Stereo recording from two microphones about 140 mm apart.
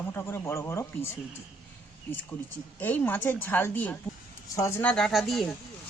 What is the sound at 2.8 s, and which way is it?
Speech, 15° left (ahead or behind).